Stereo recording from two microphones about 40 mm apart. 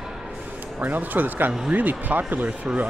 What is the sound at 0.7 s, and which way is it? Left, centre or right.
Speech, right.